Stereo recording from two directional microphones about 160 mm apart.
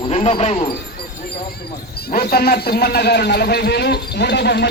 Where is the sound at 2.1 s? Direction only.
75° left (ahead or behind).